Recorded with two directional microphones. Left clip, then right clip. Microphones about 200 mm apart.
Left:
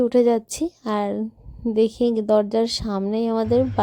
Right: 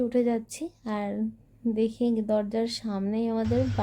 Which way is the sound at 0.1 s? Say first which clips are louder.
Left 9 dB; 40° left (ahead or behind).